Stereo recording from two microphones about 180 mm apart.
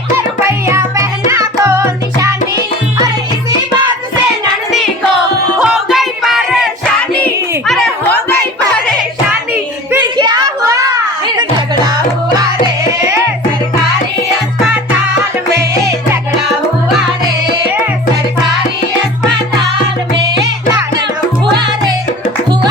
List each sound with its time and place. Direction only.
0.4 s music: 15° right (ahead or behind)
5.5 s music: centre (ahead or behind)
10.0 s a sound: 25° right (ahead or behind)
11.9 s music: 20° right (ahead or behind)